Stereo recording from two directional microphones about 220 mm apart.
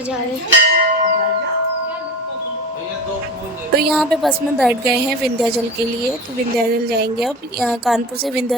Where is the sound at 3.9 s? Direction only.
Centre (ahead or behind).